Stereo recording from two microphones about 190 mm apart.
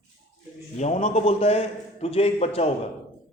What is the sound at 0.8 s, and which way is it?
A man's voice, 40° left (ahead or behind).